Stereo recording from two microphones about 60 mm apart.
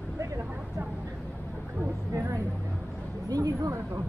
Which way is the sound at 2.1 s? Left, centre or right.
Right.